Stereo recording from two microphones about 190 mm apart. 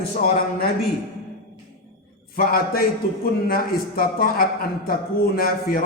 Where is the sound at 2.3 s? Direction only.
50° left (ahead or behind).